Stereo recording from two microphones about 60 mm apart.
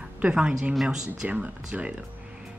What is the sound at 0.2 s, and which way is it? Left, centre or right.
Speech, centre.